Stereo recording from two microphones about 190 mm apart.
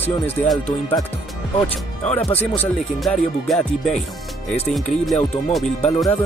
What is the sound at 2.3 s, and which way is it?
Speech, 10° left (ahead or behind).